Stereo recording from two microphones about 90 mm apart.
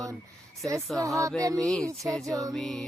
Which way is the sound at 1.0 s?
35° right (ahead or behind).